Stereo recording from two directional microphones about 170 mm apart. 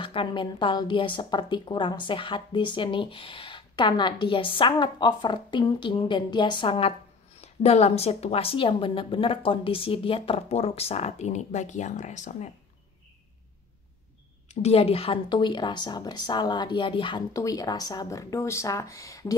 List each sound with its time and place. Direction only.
0.0 s a woman's voice: 30° left (ahead or behind)
14.5 s speech: 40° left (ahead or behind); by 19.3 s 20° left (ahead or behind)